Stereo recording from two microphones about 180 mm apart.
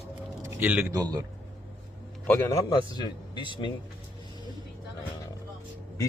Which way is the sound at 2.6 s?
25° left (ahead or behind).